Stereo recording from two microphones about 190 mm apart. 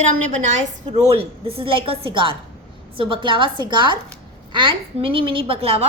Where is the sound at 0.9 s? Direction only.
30° right (ahead or behind).